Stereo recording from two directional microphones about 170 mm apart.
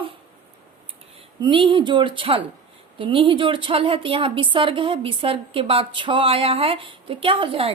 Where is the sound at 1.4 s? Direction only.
30° right (ahead or behind).